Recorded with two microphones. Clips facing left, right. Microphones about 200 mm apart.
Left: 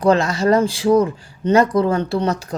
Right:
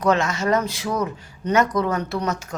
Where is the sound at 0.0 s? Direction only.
30° left (ahead or behind).